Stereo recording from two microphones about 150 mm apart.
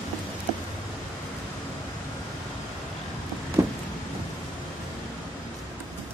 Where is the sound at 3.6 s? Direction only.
20° right (ahead or behind).